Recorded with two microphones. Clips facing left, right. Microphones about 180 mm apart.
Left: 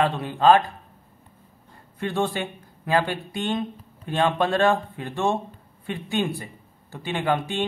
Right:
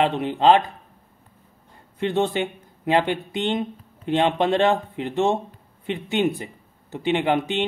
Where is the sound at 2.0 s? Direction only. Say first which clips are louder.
Right 4 dB; 20° right (ahead or behind).